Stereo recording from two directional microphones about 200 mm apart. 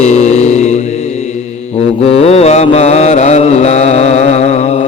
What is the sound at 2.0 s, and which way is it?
Mantra, 30° left (ahead or behind).